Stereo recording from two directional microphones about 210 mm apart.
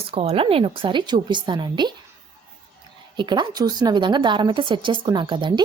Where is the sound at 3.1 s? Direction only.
20° right (ahead or behind).